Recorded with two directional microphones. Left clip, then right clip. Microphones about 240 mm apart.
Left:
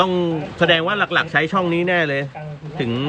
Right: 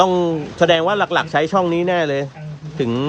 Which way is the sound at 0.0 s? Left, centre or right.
Centre.